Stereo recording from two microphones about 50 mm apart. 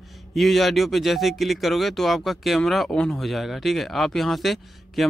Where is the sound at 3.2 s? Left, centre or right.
Centre.